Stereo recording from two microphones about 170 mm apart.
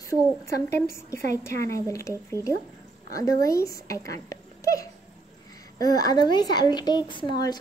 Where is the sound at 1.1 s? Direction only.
15° left (ahead or behind).